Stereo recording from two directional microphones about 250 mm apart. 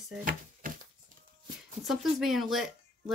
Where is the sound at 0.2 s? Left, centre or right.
Right.